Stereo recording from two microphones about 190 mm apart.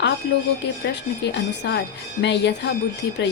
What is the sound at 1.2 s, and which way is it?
A woman's voice, 65° left (ahead or behind).